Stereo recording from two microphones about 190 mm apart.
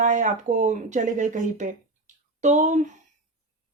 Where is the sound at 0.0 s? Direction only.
40° right (ahead or behind).